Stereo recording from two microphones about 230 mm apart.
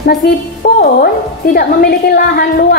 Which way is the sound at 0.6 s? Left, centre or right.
Left.